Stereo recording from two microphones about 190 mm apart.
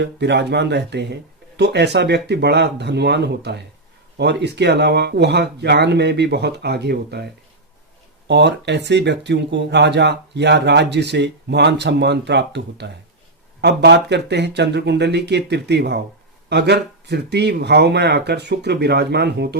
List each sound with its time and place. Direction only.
0.0 s speech: 65° right (ahead or behind)
8.3 s speech: 65° right (ahead or behind)